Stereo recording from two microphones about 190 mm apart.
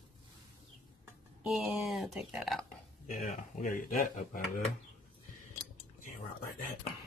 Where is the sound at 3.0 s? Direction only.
45° left (ahead or behind).